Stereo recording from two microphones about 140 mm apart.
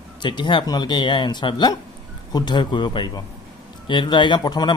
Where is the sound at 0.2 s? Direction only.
35° left (ahead or behind).